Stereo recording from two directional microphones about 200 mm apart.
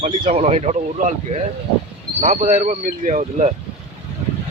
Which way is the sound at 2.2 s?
40° right (ahead or behind).